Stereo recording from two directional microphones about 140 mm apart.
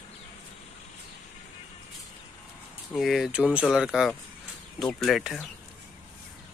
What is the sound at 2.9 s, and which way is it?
Speech, centre (ahead or behind).